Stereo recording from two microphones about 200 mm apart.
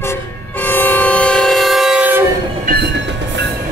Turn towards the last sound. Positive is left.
turn(degrees=-50)  # may be behind; listen again after turning